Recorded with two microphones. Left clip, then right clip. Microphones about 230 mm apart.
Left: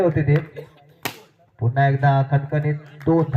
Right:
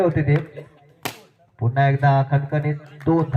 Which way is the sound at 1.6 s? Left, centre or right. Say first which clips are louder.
Even; right.